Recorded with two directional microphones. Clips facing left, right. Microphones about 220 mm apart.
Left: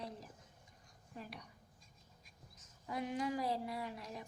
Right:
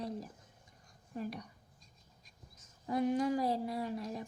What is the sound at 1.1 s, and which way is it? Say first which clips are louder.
Speech: right 10 dB; 45° right (ahead or behind).